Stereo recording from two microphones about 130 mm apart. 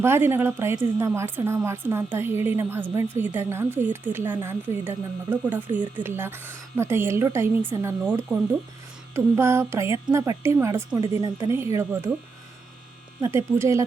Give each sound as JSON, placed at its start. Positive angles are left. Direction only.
{"t": 0.0, "sound": "speech", "side_deg": -20}
{"t": 13.2, "sound": "speech", "side_deg": -20}